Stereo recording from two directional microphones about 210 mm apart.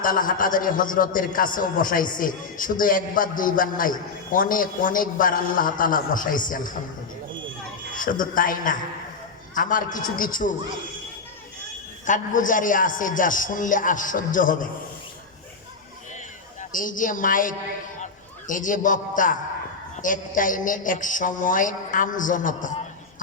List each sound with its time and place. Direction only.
0.0 s a man's voice: 40° left (ahead or behind)
7.9 s a man's voice: 40° left (ahead or behind)
12.0 s a man's voice: 40° left (ahead or behind)
16.6 s a woman's voice: 40° left (ahead or behind)